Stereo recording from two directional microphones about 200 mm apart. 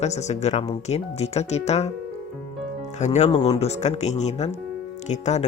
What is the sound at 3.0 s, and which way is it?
Speech, 35° left (ahead or behind).